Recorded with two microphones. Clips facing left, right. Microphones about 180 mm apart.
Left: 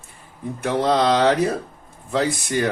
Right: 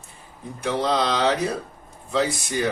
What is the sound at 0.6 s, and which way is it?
Speech, 50° left (ahead or behind).